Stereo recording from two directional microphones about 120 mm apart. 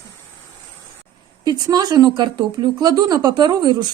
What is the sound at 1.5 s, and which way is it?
A woman's voice, 35° right (ahead or behind).